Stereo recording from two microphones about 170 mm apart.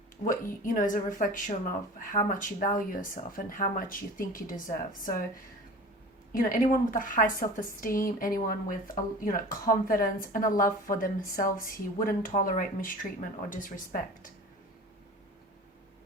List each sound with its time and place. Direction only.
0.3 s speech: 50° left (ahead or behind)
6.3 s speech: 55° left (ahead or behind)